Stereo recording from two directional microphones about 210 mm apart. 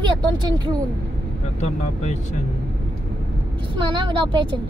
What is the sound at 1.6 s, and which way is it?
Speech, 35° left (ahead or behind).